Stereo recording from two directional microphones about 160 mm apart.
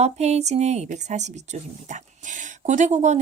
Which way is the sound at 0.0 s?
45° right (ahead or behind).